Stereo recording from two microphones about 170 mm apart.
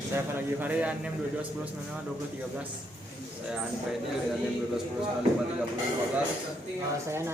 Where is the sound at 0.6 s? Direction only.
10° right (ahead or behind).